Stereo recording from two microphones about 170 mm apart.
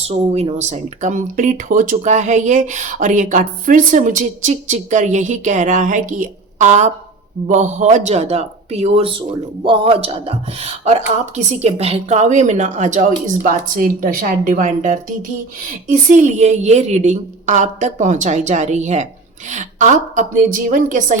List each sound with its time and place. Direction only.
0.0 s speech: 35° right (ahead or behind)